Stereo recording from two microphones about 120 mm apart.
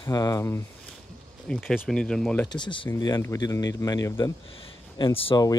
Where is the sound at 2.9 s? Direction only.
25° left (ahead or behind).